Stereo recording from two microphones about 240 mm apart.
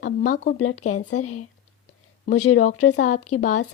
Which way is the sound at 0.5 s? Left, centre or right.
Left.